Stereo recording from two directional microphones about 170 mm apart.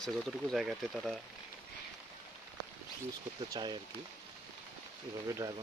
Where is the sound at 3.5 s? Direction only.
25° right (ahead or behind).